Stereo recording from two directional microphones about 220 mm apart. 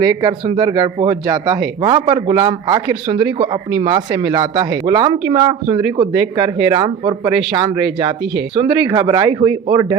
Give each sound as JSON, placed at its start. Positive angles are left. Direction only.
{"t": 0.0, "sound": "a man's voice", "side_deg": -20}